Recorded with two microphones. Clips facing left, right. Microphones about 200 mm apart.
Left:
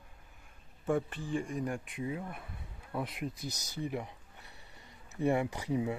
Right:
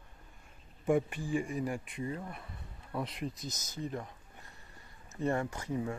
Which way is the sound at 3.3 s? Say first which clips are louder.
Left 2 dB; 65° left (ahead or behind).